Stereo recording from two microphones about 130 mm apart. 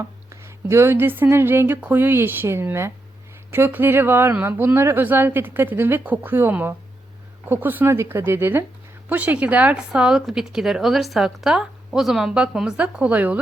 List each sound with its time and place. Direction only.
0.0 s speech: 20° right (ahead or behind)